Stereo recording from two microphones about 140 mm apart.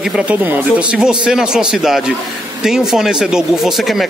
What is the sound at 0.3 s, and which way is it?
Speech, 10° right (ahead or behind).